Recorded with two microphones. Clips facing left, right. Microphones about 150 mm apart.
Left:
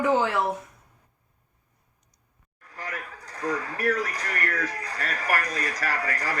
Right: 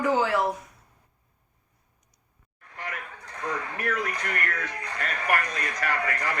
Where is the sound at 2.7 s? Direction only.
40° left (ahead or behind).